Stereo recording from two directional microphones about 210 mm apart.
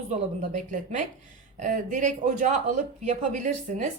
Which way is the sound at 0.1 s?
35° right (ahead or behind).